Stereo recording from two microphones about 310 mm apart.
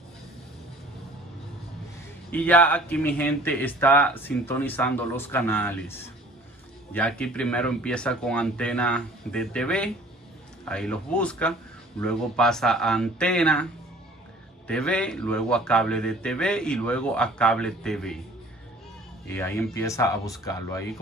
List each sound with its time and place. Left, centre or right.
2.3 s speech: centre
14.7 s speech: centre
19.2 s speech: centre